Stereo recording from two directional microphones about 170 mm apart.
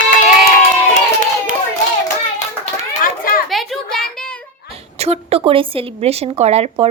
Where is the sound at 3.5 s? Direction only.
Centre (ahead or behind).